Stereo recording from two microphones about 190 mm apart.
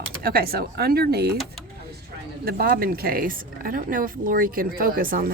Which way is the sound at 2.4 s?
55° right (ahead or behind).